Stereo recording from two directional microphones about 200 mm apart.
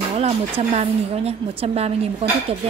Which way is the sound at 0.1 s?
30° right (ahead or behind).